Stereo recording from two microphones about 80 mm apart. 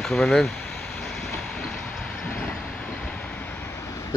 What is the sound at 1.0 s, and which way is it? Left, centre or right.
Vehicle, centre.